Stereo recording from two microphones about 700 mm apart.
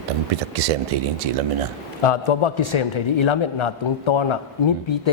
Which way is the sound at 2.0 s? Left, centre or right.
Left.